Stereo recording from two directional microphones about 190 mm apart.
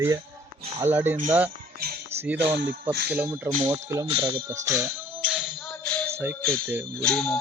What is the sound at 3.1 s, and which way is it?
Speech, 5° right (ahead or behind).